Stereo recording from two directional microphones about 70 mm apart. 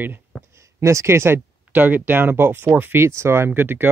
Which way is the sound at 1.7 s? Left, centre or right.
Right.